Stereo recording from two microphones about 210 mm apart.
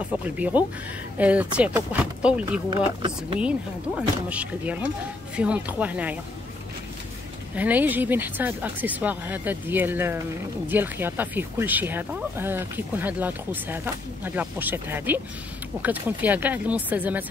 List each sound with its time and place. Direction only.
0.4 s speech: 5° right (ahead or behind)
2.7 s speech: 25° right (ahead or behind)
3.3 s speech: 5° right (ahead or behind)
7.5 s speech: 10° right (ahead or behind)